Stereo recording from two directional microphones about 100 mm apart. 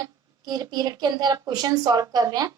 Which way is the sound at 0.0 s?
40° right (ahead or behind).